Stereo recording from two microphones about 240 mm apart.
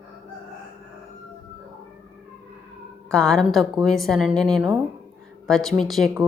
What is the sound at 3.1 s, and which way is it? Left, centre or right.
A woman's voice, centre.